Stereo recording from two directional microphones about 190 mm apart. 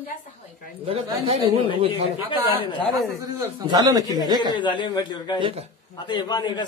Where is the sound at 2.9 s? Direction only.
15° right (ahead or behind).